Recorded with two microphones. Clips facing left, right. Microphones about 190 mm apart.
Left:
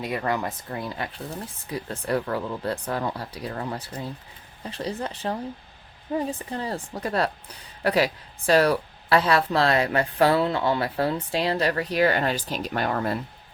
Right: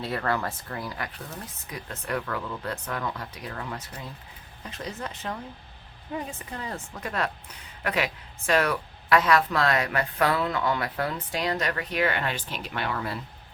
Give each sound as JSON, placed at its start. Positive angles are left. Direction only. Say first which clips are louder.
{"t": 0.0, "sound": "a woman's voice", "louder": "left 2 dB", "side_deg": 15}